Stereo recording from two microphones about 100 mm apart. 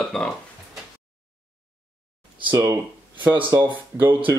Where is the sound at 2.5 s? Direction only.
35° right (ahead or behind).